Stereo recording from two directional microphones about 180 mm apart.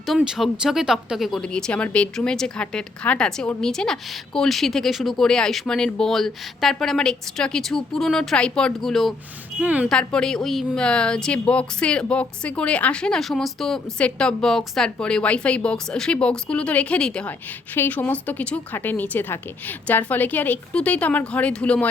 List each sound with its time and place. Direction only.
0.0 s speech: centre (ahead or behind)
9.9 s a woman's voice: 5° left (ahead or behind)